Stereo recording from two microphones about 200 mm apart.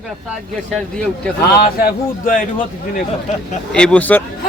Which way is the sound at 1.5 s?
45° left (ahead or behind).